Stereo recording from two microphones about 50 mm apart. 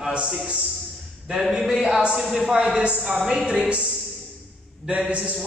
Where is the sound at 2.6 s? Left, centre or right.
Centre.